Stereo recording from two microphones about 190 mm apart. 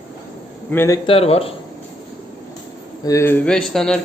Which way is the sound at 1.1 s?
30° left (ahead or behind).